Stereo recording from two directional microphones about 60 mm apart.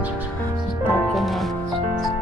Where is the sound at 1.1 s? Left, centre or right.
Centre.